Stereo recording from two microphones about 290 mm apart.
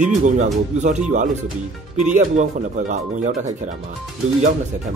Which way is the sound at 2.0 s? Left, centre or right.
Right.